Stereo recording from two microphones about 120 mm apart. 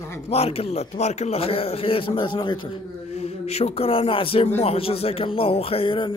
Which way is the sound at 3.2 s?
60° left (ahead or behind).